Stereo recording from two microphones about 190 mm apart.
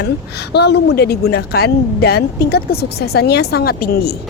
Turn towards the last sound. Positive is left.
turn(degrees=55)  # may be behind; listen again after turning